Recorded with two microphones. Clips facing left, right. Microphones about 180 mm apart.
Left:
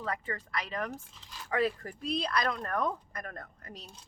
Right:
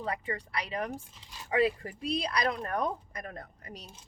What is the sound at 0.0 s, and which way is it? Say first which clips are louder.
Speech: right 2 dB; 15° right (ahead or behind).